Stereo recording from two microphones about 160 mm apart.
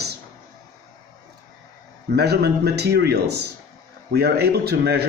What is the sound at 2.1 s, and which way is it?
Speech, 90° right.